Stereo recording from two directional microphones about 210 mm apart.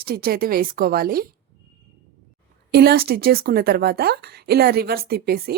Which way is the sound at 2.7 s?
50° right (ahead or behind).